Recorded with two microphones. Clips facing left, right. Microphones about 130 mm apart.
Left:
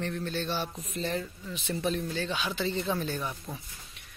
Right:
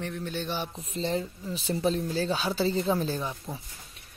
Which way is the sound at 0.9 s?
30° right (ahead or behind).